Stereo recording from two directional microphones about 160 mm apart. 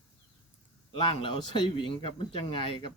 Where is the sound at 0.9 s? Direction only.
35° left (ahead or behind).